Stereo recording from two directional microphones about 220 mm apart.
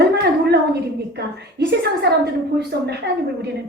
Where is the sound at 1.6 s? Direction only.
50° right (ahead or behind).